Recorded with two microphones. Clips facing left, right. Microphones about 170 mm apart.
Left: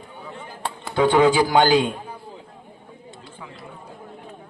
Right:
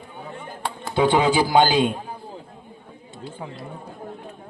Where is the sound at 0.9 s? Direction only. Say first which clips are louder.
Left 2 dB; 20° right (ahead or behind).